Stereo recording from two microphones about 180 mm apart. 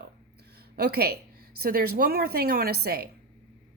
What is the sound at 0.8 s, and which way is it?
Speech, 60° right (ahead or behind).